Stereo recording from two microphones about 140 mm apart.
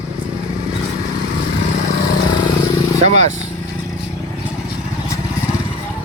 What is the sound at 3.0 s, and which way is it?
Speech, 55° right (ahead or behind).